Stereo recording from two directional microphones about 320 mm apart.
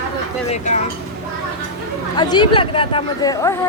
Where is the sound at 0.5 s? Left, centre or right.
Left.